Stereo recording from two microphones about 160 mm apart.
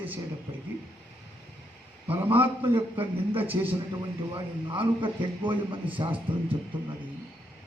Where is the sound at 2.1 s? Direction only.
15° right (ahead or behind).